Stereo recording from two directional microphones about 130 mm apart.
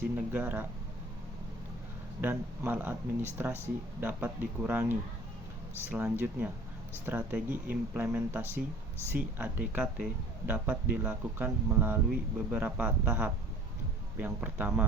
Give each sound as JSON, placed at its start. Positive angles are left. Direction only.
{"t": 0.0, "sound": "speech", "side_deg": -15}
{"t": 2.2, "sound": "speech", "side_deg": -15}